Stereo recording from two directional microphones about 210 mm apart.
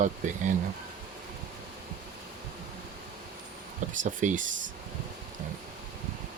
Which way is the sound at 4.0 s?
35° right (ahead or behind).